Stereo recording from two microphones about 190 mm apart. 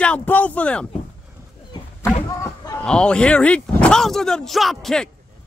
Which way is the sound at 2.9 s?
5° left (ahead or behind).